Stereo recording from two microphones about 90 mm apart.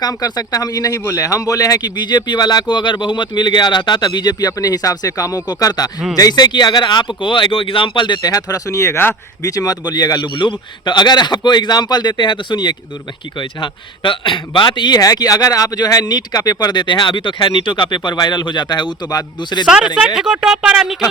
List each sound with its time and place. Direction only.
0.0 s speech: 45° left (ahead or behind)
7.2 s speech: 70° left (ahead or behind)
8.3 s speech: 40° left (ahead or behind)
9.4 s speech: 40° left (ahead or behind)
10.2 s a man's voice: 65° left (ahead or behind)
19.6 s speech: 10° right (ahead or behind)